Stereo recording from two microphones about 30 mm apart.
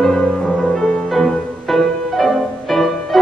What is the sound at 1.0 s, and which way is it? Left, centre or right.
Music, centre.